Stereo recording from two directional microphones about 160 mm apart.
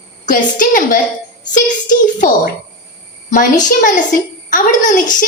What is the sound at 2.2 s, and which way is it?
Speech, 55° left (ahead or behind).